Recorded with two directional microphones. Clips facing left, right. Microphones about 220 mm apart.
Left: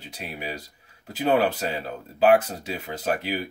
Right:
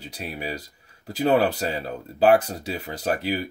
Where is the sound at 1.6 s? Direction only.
40° right (ahead or behind).